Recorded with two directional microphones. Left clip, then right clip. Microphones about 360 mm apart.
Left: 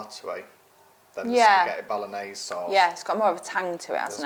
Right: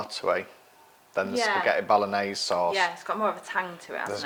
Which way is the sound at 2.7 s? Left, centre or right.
Left.